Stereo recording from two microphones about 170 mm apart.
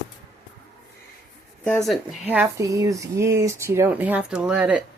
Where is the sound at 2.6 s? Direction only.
20° right (ahead or behind).